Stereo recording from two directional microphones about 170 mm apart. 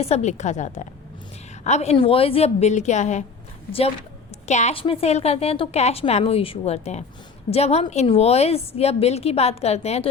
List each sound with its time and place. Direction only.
0.0 s a woman's voice: 40° left (ahead or behind)